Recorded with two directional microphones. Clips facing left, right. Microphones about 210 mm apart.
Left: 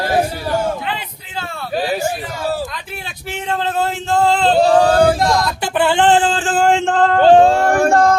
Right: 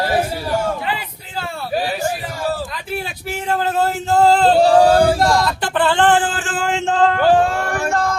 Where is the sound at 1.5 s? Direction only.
5° right (ahead or behind).